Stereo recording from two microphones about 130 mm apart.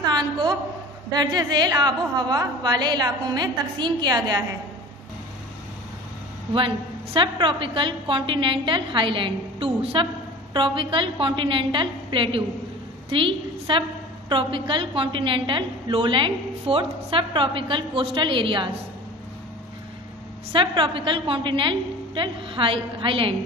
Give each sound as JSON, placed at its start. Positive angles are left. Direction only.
{"t": 0.0, "sound": "a woman's voice", "side_deg": -35}
{"t": 7.2, "sound": "a woman's voice", "side_deg": -40}
{"t": 20.5, "sound": "a woman's voice", "side_deg": -40}